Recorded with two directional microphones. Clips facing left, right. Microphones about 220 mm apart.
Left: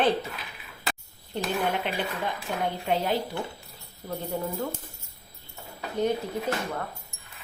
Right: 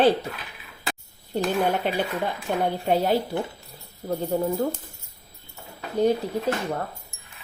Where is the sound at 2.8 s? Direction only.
40° right (ahead or behind).